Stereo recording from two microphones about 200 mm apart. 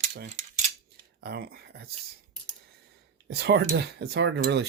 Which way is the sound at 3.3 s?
55° right (ahead or behind).